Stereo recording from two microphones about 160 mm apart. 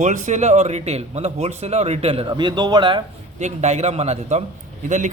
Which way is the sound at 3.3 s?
45° right (ahead or behind).